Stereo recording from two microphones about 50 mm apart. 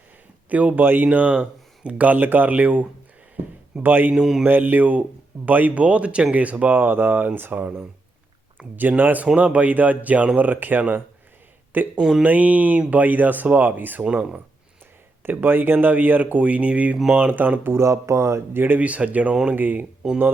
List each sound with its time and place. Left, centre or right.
0.5 s speech: right
3.8 s speech: right
4.1 s mantra: centre
4.4 s speech: right
6.7 s speech: right
7.5 s speech: right
9.2 s speech: right
11.9 s mantra: centre
12.2 s speech: right
14.0 s speech: right
15.2 s speech: right
17.7 s speech: right
18.5 s speech: right
20.0 s mantra: centre